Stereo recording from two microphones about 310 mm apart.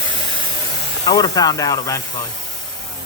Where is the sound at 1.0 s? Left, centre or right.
Centre.